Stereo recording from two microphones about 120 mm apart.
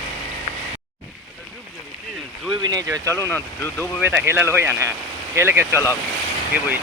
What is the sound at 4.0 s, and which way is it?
Speech, 15° right (ahead or behind).